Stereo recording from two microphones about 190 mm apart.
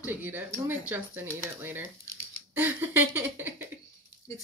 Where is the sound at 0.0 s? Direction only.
10° right (ahead or behind).